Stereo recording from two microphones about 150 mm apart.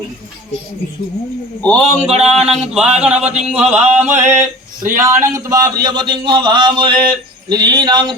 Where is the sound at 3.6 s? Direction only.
45° right (ahead or behind).